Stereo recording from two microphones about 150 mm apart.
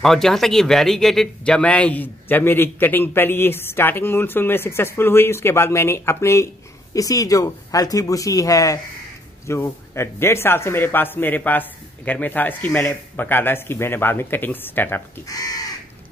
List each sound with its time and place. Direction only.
0.0 s speech: centre (ahead or behind)
15.2 s speech: 25° left (ahead or behind)